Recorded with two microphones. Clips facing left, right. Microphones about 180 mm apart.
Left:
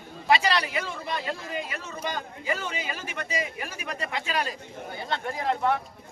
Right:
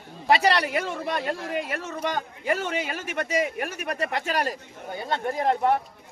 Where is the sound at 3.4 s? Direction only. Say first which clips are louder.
Right 6 dB; 55° right (ahead or behind).